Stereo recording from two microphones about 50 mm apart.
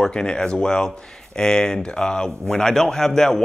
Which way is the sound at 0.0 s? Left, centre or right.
Centre.